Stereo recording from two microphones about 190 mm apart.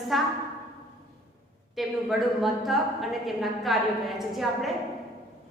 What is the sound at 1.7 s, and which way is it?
A woman's voice, centre (ahead or behind).